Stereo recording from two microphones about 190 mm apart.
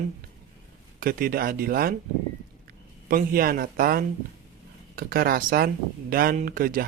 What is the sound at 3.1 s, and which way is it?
Speech, 50° right (ahead or behind).